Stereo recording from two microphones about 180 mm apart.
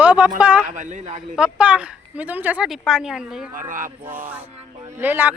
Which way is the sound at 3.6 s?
50° right (ahead or behind).